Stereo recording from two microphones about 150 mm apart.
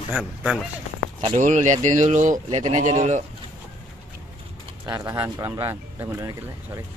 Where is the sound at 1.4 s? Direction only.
55° right (ahead or behind).